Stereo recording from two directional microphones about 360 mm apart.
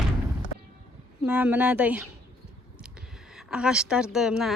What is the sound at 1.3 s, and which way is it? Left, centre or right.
Speech, centre.